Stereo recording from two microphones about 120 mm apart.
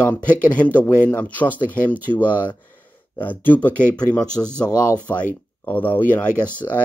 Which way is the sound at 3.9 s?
35° left (ahead or behind).